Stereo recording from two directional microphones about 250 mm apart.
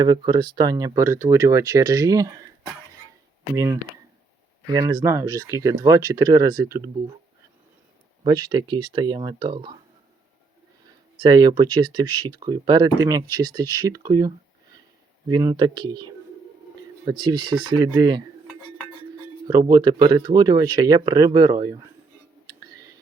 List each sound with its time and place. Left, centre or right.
0.0 s speech: centre
3.5 s speech: centre
8.2 s speech: centre
11.2 s speech: centre
19.5 s speech: centre
22.4 s whispering: centre